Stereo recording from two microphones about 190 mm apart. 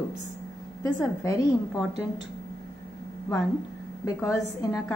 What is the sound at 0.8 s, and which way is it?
Speech, 15° left (ahead or behind).